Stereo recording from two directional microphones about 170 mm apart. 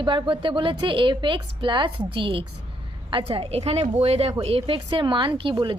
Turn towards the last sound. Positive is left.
turn(degrees=-30)  # may be behind; listen again after turning